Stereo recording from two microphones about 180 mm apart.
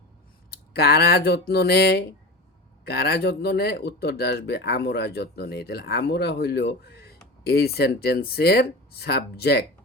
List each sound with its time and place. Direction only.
0.5 s speech: 60° left (ahead or behind)